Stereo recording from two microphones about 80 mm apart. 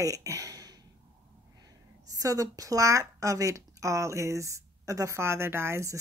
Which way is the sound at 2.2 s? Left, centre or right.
Right.